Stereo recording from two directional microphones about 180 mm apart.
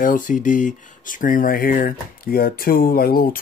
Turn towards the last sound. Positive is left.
turn(degrees=55)  # may be behind; listen again after turning